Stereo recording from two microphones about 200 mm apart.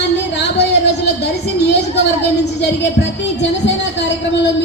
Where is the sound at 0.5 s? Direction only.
60° left (ahead or behind).